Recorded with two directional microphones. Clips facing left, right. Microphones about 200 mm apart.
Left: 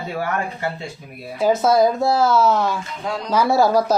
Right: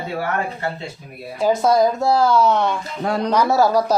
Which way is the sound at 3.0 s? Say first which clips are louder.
Right 7 dB; 60° right (ahead or behind).